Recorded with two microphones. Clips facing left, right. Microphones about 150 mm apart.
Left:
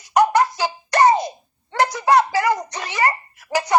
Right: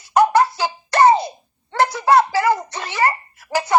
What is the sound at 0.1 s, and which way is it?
Music, 15° left (ahead or behind).